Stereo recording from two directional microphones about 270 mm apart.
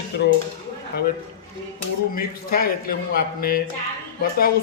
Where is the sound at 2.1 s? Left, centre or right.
Left.